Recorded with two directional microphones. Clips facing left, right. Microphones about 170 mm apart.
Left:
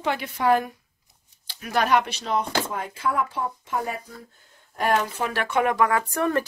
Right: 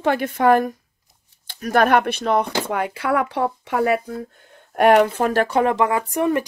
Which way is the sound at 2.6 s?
70° right (ahead or behind).